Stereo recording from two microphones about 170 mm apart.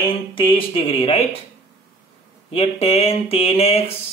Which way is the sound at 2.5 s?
35° left (ahead or behind).